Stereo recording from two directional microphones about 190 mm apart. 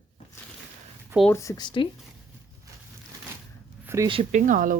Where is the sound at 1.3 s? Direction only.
15° left (ahead or behind).